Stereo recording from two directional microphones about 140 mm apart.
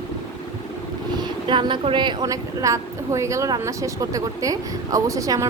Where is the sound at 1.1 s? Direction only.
35° right (ahead or behind).